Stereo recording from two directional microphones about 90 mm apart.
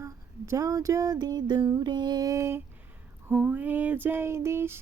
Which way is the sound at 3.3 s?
20° right (ahead or behind).